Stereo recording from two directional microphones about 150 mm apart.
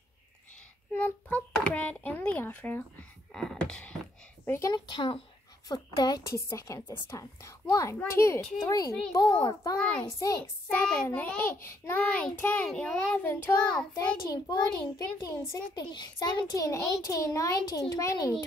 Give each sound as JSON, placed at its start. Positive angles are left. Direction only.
{"t": 0.9, "sound": "a child's voice", "side_deg": 10}
{"t": 4.5, "sound": "a child's voice", "side_deg": 20}
{"t": 4.7, "sound": "a child's voice", "side_deg": 30}
{"t": 10.7, "sound": "a child's voice", "side_deg": 10}
{"t": 14.3, "sound": "a child's voice", "side_deg": 25}